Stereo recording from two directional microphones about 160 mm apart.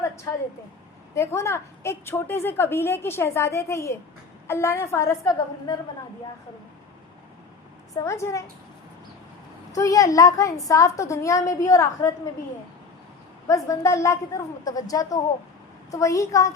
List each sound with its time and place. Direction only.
1.1 s a woman's voice: 15° left (ahead or behind)
7.9 s a woman's voice: 20° left (ahead or behind)
9.7 s a woman's voice: 20° left (ahead or behind)
13.5 s a woman's voice: 20° left (ahead or behind)